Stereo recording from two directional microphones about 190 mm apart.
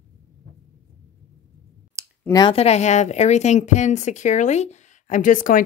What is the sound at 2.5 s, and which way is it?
A woman's voice, 35° left (ahead or behind).